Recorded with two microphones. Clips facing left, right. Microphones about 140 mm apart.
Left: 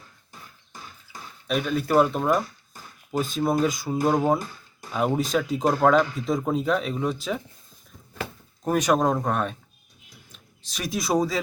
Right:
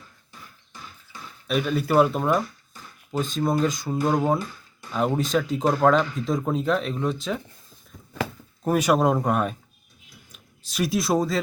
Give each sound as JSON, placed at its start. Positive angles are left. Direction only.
{"t": 1.5, "sound": "speech", "side_deg": 0}
{"t": 4.9, "sound": "speech", "side_deg": 5}
{"t": 8.6, "sound": "speech", "side_deg": -5}